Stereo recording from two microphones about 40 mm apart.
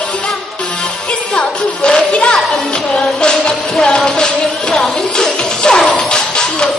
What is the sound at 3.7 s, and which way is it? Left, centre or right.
Speech, centre.